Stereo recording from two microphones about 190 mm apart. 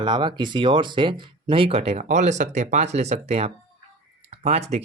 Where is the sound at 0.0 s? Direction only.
25° right (ahead or behind).